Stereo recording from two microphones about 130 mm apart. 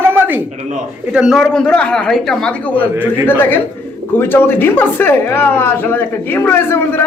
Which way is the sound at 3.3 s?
15° left (ahead or behind).